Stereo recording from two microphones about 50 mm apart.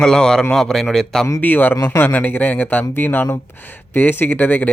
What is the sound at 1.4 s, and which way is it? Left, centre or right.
Speech, left.